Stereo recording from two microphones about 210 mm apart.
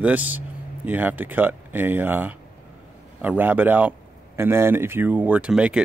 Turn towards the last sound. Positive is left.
turn(degrees=-5)  # may be behind; listen again after turning